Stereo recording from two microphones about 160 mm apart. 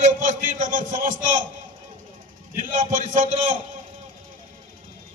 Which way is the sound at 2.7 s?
55° right (ahead or behind).